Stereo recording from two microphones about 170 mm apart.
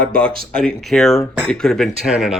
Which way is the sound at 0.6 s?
Centre (ahead or behind).